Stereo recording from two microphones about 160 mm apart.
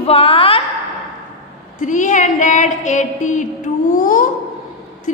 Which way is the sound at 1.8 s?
50° left (ahead or behind).